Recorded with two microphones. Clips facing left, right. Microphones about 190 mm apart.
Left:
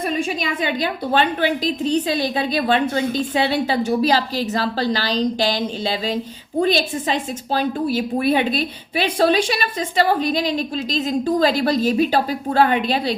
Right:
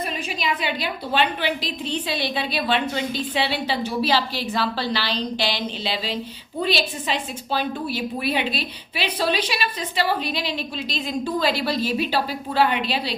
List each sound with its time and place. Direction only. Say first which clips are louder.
0.4 s a woman's voice: left 3 dB; 45° left (ahead or behind)